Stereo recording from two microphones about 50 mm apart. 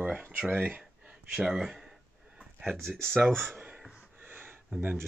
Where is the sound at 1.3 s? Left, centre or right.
Centre.